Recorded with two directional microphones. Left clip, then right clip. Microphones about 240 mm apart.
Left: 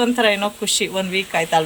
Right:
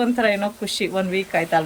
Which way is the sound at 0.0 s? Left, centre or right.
Centre.